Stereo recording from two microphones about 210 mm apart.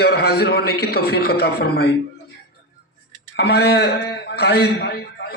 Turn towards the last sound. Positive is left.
turn(degrees=55)  # may be behind; listen again after turning